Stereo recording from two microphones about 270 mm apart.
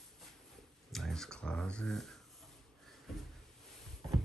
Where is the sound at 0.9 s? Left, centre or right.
Centre.